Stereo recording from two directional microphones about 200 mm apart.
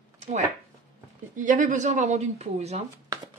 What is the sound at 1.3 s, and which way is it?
Speech, 40° right (ahead or behind).